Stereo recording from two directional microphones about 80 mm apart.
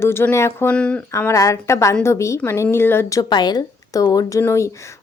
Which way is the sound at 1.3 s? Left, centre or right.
Left.